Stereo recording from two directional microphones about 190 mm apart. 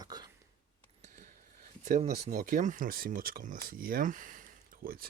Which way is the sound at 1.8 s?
40° right (ahead or behind).